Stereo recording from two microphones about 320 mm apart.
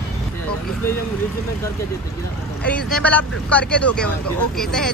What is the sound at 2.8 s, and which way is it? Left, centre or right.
Speech, centre.